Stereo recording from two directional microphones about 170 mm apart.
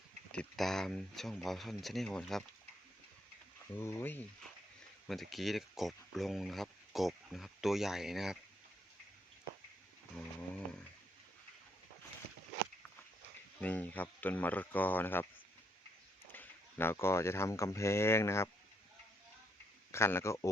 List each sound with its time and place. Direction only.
0.3 s speech: 5° left (ahead or behind)
3.8 s speech: 15° left (ahead or behind)
5.0 s speech: centre (ahead or behind)
10.2 s a sound: 5° left (ahead or behind)
13.6 s speech: 10° left (ahead or behind)
16.3 s speech: 10° left (ahead or behind)
19.9 s speech: 15° left (ahead or behind)